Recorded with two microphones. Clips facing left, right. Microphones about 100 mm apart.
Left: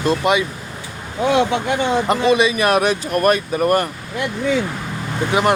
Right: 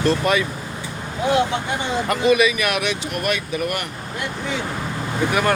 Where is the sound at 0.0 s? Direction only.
20° left (ahead or behind).